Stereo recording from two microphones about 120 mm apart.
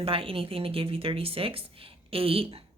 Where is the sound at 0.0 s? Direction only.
50° right (ahead or behind).